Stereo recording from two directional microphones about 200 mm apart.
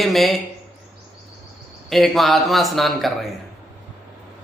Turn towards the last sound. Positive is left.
turn(degrees=0)  # may be behind; listen again after turning